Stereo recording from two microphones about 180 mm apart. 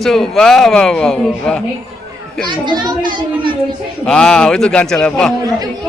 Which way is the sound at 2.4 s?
25° right (ahead or behind).